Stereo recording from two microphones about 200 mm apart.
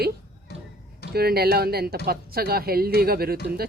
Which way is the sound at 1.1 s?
50° right (ahead or behind).